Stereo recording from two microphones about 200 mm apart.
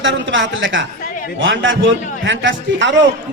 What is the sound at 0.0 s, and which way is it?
A man's voice, 65° right (ahead or behind).